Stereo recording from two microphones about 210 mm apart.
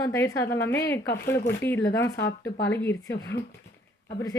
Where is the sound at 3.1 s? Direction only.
55° left (ahead or behind).